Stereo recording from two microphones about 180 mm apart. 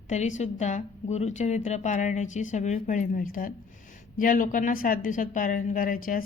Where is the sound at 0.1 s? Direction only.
40° left (ahead or behind).